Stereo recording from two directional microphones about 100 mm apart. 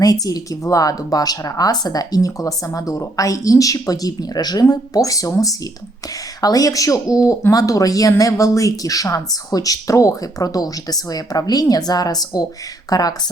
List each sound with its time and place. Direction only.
0.0 s speech: 40° left (ahead or behind)